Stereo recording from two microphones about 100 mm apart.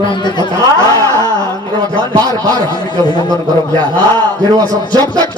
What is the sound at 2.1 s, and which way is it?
Speech, 40° right (ahead or behind).